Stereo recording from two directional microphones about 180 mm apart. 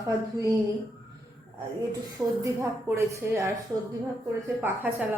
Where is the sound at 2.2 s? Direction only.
10° right (ahead or behind).